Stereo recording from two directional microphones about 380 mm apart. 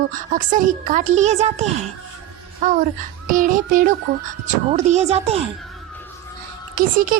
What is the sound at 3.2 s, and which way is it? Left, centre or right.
A woman's voice, right.